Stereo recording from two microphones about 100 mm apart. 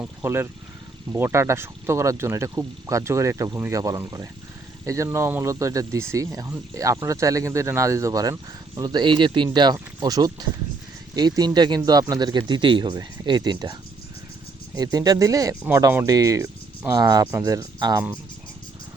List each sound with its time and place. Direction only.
0.0 s speech: 25° right (ahead or behind)
5.0 s speech: 25° right (ahead or behind); by 13.7 s 45° right (ahead or behind)
14.8 s speech: 40° right (ahead or behind)